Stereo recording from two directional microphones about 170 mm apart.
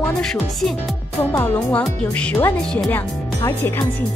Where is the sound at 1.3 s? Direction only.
15° left (ahead or behind).